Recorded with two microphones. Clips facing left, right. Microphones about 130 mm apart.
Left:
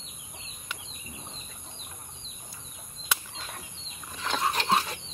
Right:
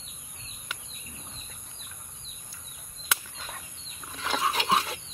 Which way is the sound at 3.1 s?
Centre (ahead or behind).